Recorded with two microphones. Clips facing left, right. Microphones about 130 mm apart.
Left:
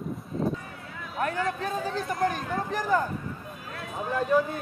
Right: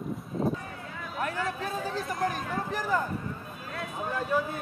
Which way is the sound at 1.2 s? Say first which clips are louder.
Left 4 dB; 5° right (ahead or behind).